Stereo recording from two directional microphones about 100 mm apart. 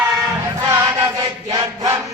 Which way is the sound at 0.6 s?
30° right (ahead or behind).